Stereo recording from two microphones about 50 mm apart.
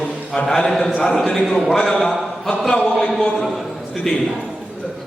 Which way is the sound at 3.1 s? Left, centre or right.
Centre.